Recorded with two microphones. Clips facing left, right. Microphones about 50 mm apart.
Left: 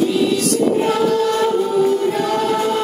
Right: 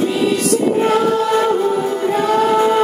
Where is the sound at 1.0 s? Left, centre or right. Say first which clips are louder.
Right 1 dB; centre.